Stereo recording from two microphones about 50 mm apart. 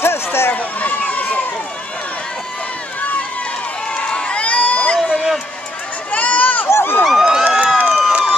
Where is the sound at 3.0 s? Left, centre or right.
Left.